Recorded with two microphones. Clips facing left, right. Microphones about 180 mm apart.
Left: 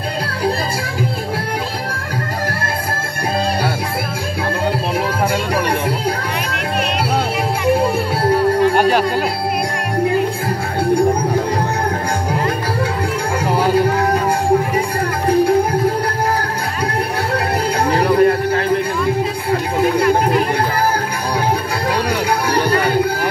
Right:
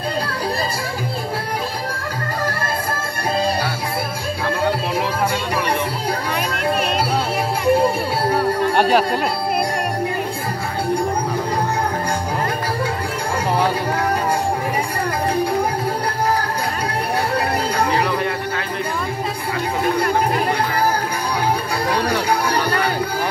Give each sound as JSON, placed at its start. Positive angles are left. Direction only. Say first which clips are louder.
{"t": 8.7, "sound": "music", "louder": "left 2 dB", "side_deg": 0}
{"t": 17.9, "sound": "music", "louder": "left 7 dB", "side_deg": 45}